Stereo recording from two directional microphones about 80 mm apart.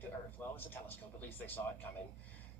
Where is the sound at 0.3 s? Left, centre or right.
Left.